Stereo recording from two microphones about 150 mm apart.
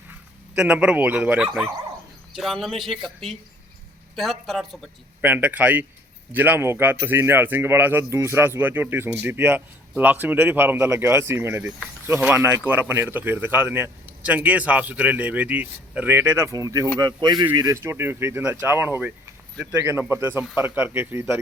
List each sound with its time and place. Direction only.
0.1 s a man's voice: 10° right (ahead or behind)
5.2 s speech: 10° right (ahead or behind)